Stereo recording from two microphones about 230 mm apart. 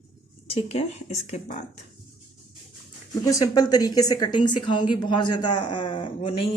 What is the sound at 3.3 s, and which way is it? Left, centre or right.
A man's voice, centre.